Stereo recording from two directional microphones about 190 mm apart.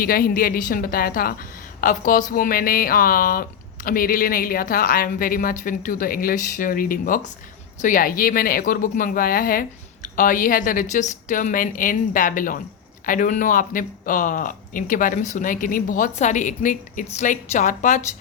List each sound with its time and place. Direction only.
0.0 s speech: 50° left (ahead or behind)